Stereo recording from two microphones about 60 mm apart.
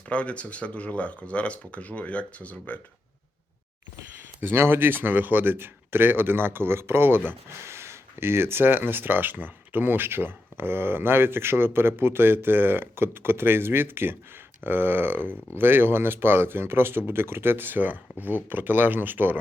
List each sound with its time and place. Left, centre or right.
0.1 s speech: left
4.4 s speech: right